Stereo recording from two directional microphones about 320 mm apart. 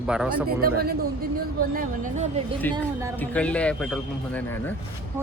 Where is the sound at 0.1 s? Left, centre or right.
Centre.